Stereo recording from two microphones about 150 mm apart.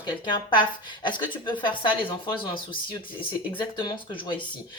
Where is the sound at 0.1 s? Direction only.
30° left (ahead or behind).